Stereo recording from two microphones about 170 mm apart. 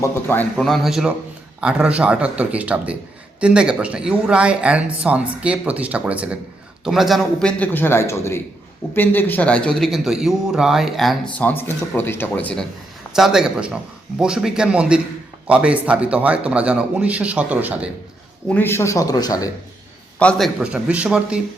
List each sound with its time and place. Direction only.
0.0 s speech: 15° left (ahead or behind)
0.5 s a man's voice: centre (ahead or behind)
13.1 s a man's voice: 5° right (ahead or behind)
18.4 s speech: 10° left (ahead or behind)
20.1 s speech: 5° left (ahead or behind)
20.6 s a man's voice: 5° right (ahead or behind)